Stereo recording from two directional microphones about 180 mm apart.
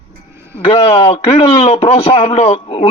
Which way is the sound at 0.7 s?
30° left (ahead or behind).